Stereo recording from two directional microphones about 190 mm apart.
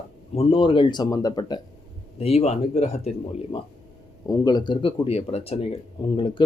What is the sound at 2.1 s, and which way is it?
Speech, 35° left (ahead or behind).